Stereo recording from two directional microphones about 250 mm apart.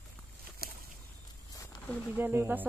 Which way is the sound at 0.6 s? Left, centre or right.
Right.